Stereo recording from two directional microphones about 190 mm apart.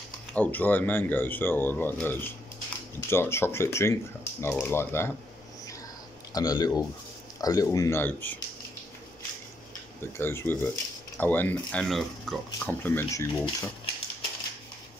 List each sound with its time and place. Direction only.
0.3 s speech: 10° left (ahead or behind)
6.3 s speech: 20° left (ahead or behind)
10.1 s speech: 15° left (ahead or behind)